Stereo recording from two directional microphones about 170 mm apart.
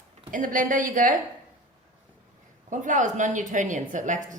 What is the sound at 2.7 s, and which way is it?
Speech, 50° right (ahead or behind).